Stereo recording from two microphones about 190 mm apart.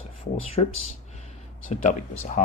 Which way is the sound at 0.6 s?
30° left (ahead or behind).